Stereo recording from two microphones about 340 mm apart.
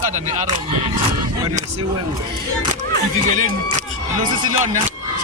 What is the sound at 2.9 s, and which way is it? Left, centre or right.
Speech, right.